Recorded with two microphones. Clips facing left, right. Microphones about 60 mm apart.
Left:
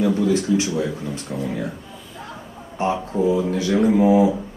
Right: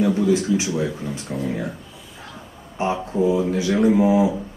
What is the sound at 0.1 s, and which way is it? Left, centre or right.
Speech, centre.